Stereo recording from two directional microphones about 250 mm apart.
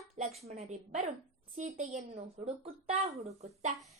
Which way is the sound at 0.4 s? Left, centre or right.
Right.